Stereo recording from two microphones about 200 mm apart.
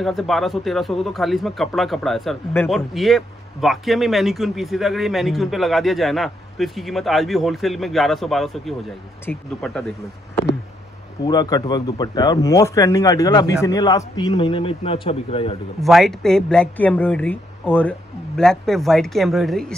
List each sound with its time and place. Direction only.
0.0 s speech: centre (ahead or behind)
11.2 s a man's voice: 20° left (ahead or behind)
15.8 s speech: centre (ahead or behind)